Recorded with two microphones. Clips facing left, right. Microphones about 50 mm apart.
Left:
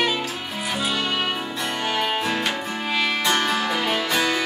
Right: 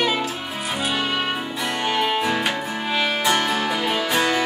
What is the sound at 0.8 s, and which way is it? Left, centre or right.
Music, centre.